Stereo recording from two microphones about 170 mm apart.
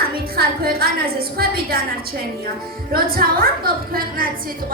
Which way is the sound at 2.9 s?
60° right (ahead or behind).